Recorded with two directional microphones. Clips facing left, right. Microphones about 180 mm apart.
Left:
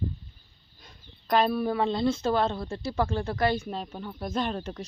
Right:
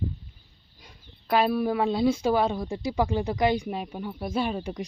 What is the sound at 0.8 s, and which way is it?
Speech, 10° right (ahead or behind).